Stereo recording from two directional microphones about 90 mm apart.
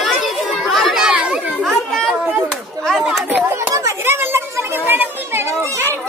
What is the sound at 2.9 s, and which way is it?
Chatter, 5° right (ahead or behind).